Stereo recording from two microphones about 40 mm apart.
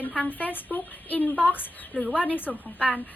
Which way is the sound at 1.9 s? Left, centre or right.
Centre.